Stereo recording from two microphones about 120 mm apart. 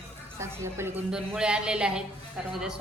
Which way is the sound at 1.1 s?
5° right (ahead or behind).